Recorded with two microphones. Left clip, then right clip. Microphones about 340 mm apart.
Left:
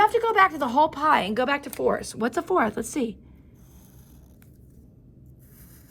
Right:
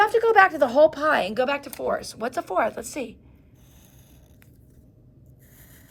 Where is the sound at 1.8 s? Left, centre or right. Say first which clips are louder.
Left 3 dB; left.